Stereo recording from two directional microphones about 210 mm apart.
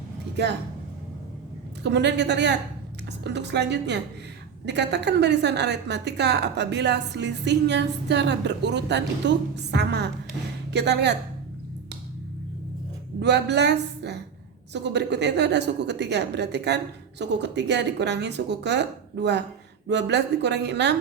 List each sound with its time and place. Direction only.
0.4 s a woman's voice: 55° right (ahead or behind)
1.8 s a woman's voice: 55° right (ahead or behind)
13.1 s a woman's voice: 55° right (ahead or behind)